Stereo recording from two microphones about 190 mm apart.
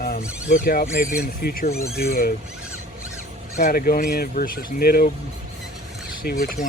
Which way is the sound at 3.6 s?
50° left (ahead or behind).